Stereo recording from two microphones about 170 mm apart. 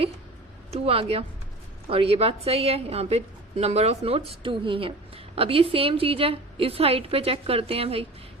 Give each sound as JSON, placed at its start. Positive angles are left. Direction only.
{"t": 0.7, "sound": "a woman's voice", "side_deg": -35}